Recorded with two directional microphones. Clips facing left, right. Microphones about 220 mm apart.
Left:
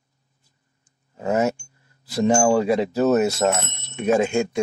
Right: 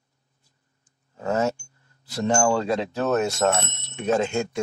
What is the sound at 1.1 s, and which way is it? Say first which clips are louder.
Speech: left 3 dB; 15° left (ahead or behind).